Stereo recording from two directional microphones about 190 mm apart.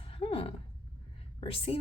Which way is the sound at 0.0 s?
30° left (ahead or behind).